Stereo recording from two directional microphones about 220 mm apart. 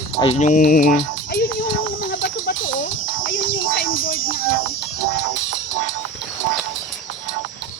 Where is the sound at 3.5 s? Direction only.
40° left (ahead or behind).